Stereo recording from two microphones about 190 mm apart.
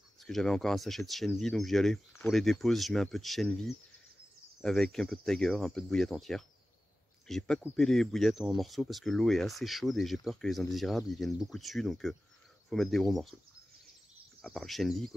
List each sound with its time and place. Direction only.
0.2 s speech: centre (ahead or behind)
14.4 s speech: centre (ahead or behind)